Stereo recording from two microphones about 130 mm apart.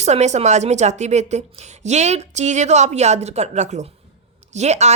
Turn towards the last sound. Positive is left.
turn(degrees=-60)  # may be behind; listen again after turning